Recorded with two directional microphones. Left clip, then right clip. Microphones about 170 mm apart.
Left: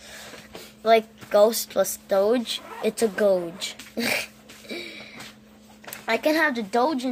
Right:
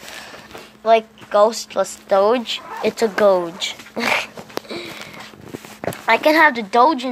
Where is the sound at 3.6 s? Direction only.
15° left (ahead or behind).